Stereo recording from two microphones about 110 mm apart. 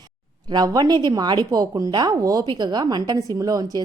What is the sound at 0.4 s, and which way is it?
A woman's voice, 35° right (ahead or behind).